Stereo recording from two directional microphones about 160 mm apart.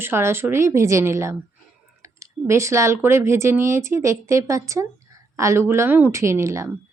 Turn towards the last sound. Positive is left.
turn(degrees=-20)  # may be behind; listen again after turning